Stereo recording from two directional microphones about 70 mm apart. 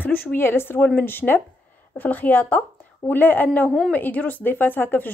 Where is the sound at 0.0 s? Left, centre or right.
Left.